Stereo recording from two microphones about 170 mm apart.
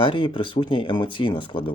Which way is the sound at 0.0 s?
30° left (ahead or behind).